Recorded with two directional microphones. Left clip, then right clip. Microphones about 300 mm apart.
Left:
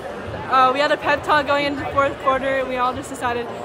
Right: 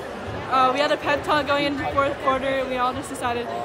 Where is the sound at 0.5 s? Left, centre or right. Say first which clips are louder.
Left 3 dB; centre.